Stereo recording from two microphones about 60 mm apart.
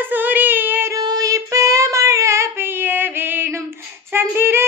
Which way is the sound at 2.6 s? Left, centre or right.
Right.